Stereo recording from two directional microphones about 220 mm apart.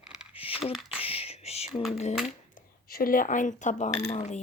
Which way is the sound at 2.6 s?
40° left (ahead or behind).